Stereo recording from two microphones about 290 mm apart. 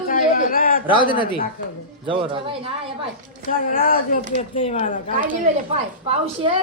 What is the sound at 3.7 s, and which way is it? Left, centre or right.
Speech, left.